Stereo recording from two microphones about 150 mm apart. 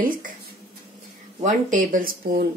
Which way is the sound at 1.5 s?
60° right (ahead or behind).